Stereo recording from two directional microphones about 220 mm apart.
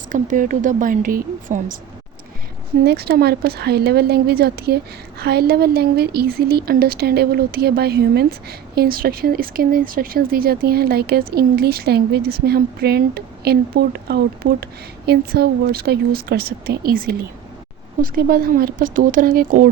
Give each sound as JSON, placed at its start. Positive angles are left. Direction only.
{"t": 0.1, "sound": "a woman's voice", "side_deg": -35}
{"t": 2.8, "sound": "a woman's voice", "side_deg": -45}